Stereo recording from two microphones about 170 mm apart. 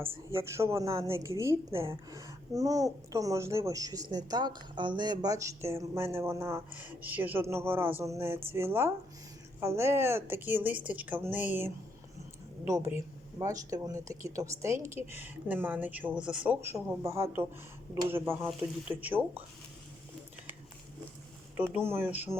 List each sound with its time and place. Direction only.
0.0 s a woman's voice: 15° right (ahead or behind)
21.7 s a woman's voice: 15° right (ahead or behind)